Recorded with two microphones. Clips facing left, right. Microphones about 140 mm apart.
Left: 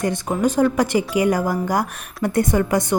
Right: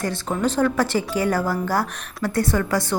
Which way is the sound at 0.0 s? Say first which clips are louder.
Left 3 dB; 15° left (ahead or behind).